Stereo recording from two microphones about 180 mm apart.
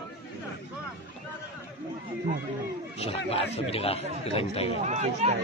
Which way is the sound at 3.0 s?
35° left (ahead or behind).